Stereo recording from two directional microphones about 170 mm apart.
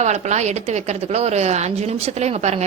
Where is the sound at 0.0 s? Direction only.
40° right (ahead or behind).